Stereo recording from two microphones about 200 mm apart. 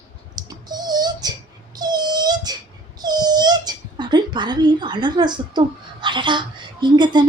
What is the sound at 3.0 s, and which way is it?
A child's voice, 20° right (ahead or behind).